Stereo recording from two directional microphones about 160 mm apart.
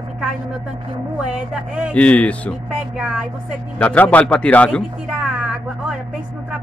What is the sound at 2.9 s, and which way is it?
Speech, 5° right (ahead or behind).